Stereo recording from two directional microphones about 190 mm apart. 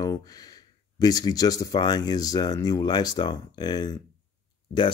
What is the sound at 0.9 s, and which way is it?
Speech, 20° left (ahead or behind).